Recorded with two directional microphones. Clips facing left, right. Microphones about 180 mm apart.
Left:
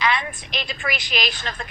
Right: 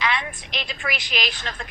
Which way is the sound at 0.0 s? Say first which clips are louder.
Left 3 dB; 45° left (ahead or behind).